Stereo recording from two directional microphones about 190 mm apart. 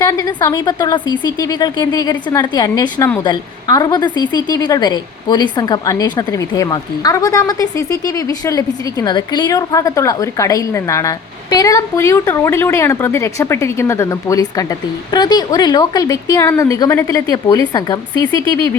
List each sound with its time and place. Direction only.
0.0 s a woman's voice: 15° left (ahead or behind)